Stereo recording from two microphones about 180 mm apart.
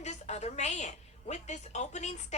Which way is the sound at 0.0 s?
35° left (ahead or behind).